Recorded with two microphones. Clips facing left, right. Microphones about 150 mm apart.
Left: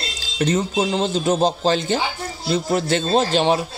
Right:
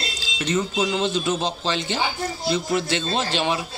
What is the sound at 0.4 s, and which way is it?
Speech, 40° left (ahead or behind).